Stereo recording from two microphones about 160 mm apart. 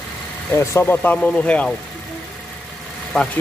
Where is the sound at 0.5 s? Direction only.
15° left (ahead or behind).